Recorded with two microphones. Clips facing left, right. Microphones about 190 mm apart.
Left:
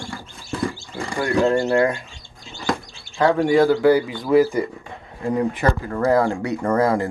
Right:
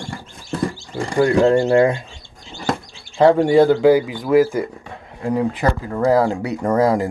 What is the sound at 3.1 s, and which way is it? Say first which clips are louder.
Speech: right 4 dB; 30° right (ahead or behind).